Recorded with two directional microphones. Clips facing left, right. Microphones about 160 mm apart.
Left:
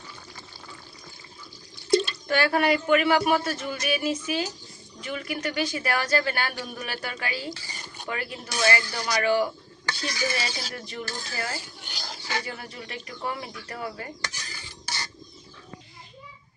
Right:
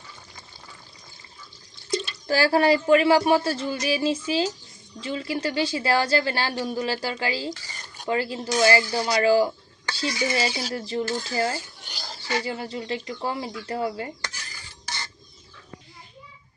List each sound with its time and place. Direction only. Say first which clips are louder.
2.2 s speech: right 3 dB; 30° right (ahead or behind)
7.5 s speech: even; 20° left (ahead or behind)
8.0 s speech: right 8 dB; 25° right (ahead or behind)
11.9 s a sound: even; centre (ahead or behind)
12.4 s speech: right 6 dB; 25° right (ahead or behind)